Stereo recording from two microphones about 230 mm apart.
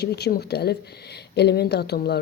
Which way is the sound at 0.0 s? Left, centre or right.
Left.